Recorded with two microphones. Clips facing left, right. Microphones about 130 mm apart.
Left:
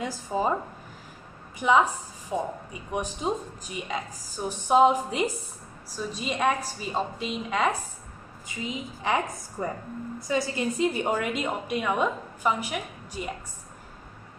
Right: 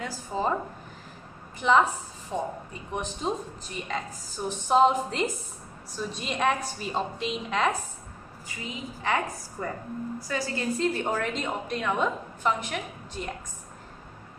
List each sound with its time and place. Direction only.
0.3 s a woman's voice: 15° left (ahead or behind)
1.6 s a woman's voice: 10° left (ahead or behind)
8.5 s a woman's voice: 15° left (ahead or behind)